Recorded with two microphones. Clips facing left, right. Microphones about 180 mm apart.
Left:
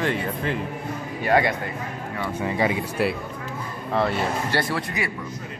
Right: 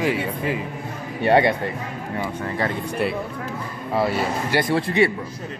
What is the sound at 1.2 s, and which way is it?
Speech, 25° right (ahead or behind).